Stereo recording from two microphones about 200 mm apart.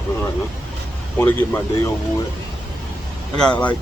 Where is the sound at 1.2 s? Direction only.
10° left (ahead or behind).